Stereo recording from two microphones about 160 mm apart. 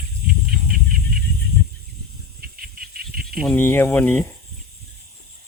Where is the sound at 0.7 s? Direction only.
65° right (ahead or behind).